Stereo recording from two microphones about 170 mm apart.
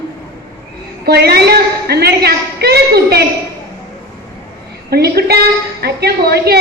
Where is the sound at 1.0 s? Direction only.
70° right (ahead or behind).